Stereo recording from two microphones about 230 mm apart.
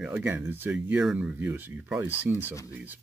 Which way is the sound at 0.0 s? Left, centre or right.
Centre.